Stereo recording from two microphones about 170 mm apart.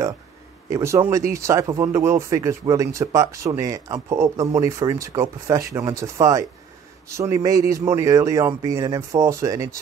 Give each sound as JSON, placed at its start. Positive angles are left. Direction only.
{"t": 0.7, "sound": "speech", "side_deg": -20}